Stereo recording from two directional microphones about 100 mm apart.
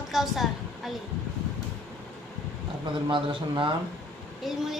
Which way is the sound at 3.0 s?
55° right (ahead or behind).